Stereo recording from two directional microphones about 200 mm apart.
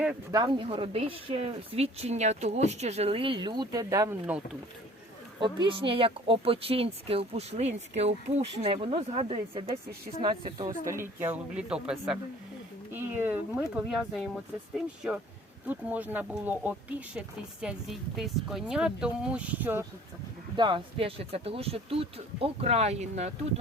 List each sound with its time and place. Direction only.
0.3 s a woman's voice: 20° right (ahead or behind)
5.4 s a woman's voice: 25° right (ahead or behind)
10.8 s a woman's voice: 15° right (ahead or behind)
20.6 s a woman's voice: 25° right (ahead or behind)